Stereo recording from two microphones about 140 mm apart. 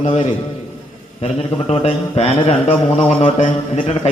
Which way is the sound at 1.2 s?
45° left (ahead or behind).